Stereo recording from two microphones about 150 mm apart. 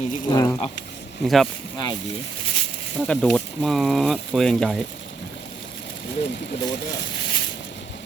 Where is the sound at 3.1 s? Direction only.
10° left (ahead or behind).